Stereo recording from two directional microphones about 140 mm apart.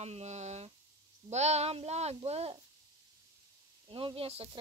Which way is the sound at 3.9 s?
40° right (ahead or behind).